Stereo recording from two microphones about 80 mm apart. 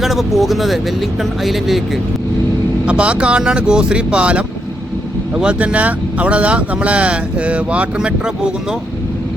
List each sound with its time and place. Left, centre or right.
0.0 s speech: centre
2.8 s speech: centre